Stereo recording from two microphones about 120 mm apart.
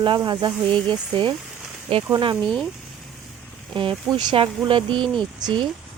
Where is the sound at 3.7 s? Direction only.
45° right (ahead or behind).